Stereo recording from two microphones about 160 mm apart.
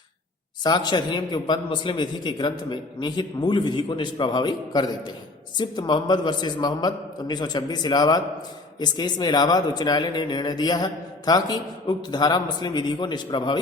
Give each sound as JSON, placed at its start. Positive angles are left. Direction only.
{"t": 0.6, "sound": "speech", "side_deg": 25}